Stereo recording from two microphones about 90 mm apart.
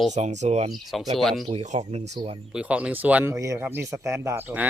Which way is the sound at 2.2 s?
65° right (ahead or behind).